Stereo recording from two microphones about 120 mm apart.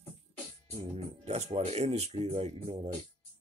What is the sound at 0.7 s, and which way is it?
Speech, 60° right (ahead or behind).